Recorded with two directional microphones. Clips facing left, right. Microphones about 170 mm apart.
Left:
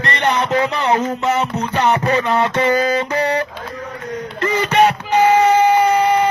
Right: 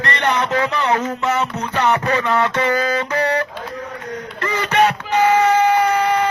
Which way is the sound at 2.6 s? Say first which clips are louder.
Left 3 dB; 15° left (ahead or behind).